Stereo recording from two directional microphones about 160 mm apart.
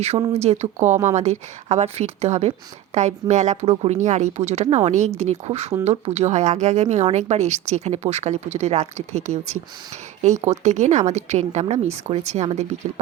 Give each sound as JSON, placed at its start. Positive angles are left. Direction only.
{"t": 0.3, "sound": "a woman's voice", "side_deg": -45}